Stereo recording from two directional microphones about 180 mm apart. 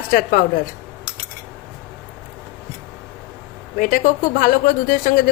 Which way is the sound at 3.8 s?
50° left (ahead or behind).